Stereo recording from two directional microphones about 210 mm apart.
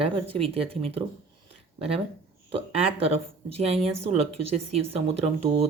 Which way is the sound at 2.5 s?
30° right (ahead or behind).